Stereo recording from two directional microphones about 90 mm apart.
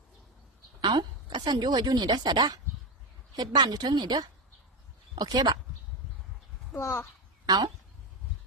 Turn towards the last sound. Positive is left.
turn(degrees=-45)  # may be behind; listen again after turning